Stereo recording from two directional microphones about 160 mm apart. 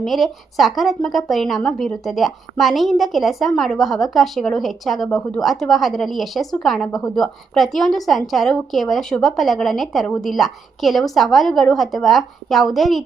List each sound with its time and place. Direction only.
0.0 s a woman's voice: centre (ahead or behind)